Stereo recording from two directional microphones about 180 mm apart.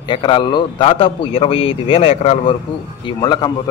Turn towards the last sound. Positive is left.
turn(degrees=20)  # may be behind; listen again after turning